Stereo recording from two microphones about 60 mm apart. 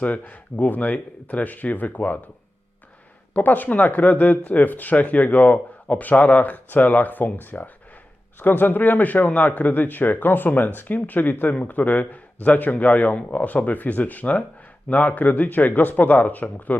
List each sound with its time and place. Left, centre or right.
0.0 s speech: left
3.3 s a man's voice: left